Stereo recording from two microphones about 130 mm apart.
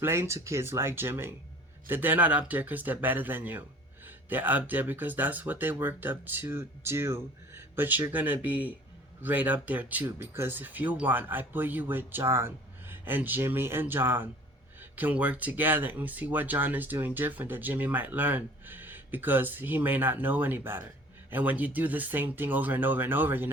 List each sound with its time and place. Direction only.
0.0 s speech: 20° right (ahead or behind)